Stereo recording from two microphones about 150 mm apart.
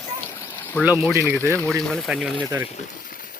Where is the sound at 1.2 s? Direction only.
15° left (ahead or behind).